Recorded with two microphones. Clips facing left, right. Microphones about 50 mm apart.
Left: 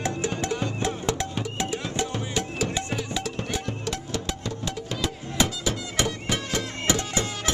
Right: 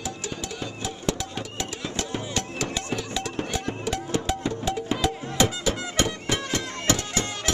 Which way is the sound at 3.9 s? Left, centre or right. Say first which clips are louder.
Right 6 dB; centre.